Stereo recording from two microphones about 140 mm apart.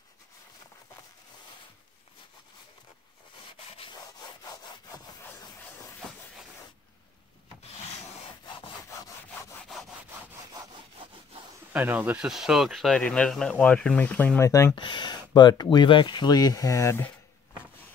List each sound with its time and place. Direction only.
11.7 s speech: 15° right (ahead or behind); by 14.8 s 20° left (ahead or behind)
14.8 s speech: 35° left (ahead or behind); by 17.1 s 20° left (ahead or behind)